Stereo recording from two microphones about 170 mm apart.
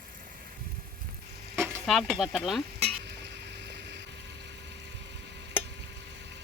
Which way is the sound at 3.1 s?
85° right.